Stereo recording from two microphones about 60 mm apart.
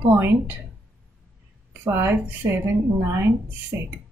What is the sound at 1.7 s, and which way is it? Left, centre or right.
Speech, right.